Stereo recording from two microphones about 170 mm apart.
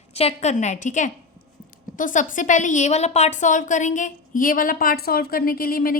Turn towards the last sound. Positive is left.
turn(degrees=60)  # may be behind; listen again after turning